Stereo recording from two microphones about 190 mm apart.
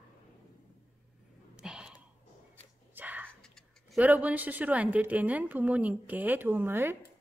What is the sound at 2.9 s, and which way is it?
Whispering, 10° right (ahead or behind).